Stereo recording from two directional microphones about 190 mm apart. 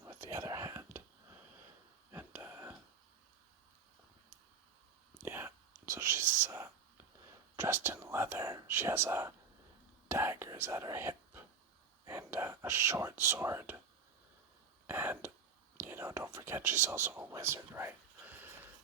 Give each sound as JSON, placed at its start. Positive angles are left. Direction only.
{"t": 0.0, "sound": "whispering", "side_deg": -15}
{"t": 2.1, "sound": "a sound", "side_deg": -10}
{"t": 5.2, "sound": "whispering", "side_deg": -10}
{"t": 7.5, "sound": "speech", "side_deg": -10}
{"t": 10.1, "sound": "whispering", "side_deg": -10}
{"t": 12.0, "sound": "speech", "side_deg": -10}
{"t": 14.8, "sound": "throat clearing", "side_deg": -10}
{"t": 15.8, "sound": "speech", "side_deg": -15}